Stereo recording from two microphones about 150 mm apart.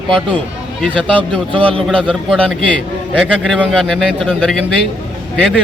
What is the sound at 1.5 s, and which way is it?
Speech, 35° right (ahead or behind).